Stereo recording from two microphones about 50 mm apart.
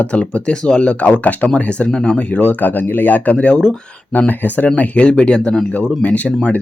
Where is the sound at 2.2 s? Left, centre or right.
Left.